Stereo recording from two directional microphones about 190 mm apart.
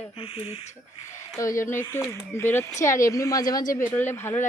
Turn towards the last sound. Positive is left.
turn(degrees=10)  # may be behind; listen again after turning